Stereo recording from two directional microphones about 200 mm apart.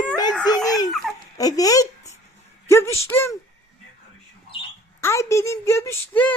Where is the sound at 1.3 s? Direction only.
20° left (ahead or behind).